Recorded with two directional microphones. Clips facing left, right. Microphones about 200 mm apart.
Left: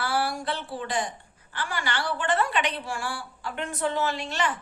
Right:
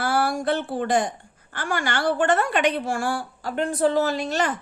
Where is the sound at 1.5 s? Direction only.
50° right (ahead or behind).